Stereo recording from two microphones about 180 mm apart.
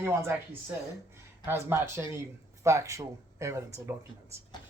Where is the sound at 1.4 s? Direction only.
15° right (ahead or behind).